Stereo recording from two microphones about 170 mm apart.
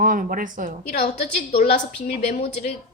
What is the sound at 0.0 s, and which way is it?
Speech, 50° right (ahead or behind).